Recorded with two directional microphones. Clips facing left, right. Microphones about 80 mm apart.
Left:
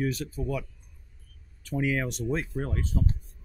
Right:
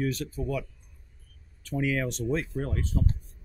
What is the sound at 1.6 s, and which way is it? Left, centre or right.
Speech, centre.